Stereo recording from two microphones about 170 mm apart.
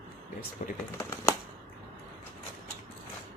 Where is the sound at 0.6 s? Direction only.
50° left (ahead or behind).